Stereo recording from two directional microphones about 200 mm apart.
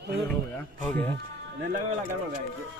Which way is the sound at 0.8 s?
10° left (ahead or behind).